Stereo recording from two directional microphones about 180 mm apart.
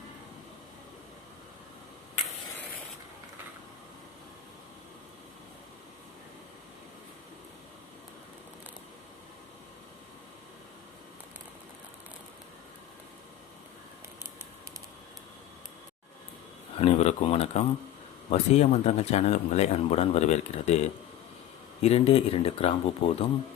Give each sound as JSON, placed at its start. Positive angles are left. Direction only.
{"t": 16.7, "sound": "speech", "side_deg": 35}